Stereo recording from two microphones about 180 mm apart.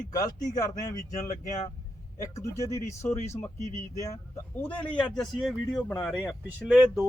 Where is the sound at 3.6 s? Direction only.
40° left (ahead or behind).